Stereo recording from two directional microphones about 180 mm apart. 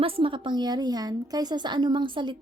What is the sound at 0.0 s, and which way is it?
A woman's voice, 30° right (ahead or behind).